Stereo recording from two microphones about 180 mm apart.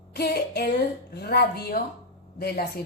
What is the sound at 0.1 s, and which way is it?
A woman's voice, 60° left (ahead or behind).